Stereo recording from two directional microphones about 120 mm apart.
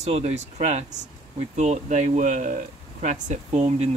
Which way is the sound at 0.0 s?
65° right (ahead or behind).